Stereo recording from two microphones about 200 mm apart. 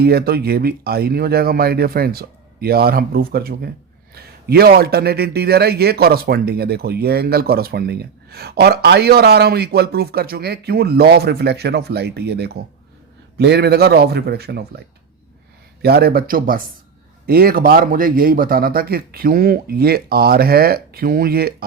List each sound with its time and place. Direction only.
0.0 s a man's voice: 50° right (ahead or behind)
15.8 s a man's voice: 50° right (ahead or behind)